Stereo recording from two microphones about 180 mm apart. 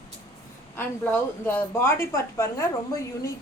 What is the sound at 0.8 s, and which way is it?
A woman's voice, 10° left (ahead or behind).